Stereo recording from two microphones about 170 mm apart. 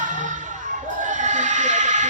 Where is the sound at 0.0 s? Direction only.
50° right (ahead or behind).